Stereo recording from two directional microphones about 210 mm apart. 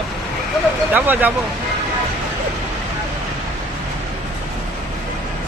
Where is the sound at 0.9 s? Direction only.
10° right (ahead or behind).